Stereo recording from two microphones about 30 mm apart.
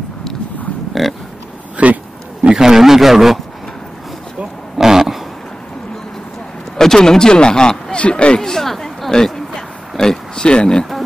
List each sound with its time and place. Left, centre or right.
1.0 s a sound: centre
1.8 s speech: right
2.6 s a man's voice: centre
4.7 s a sound: centre
6.8 s a man's voice: centre; by 8.4 s left
8.4 s speech: centre; by 10.9 s left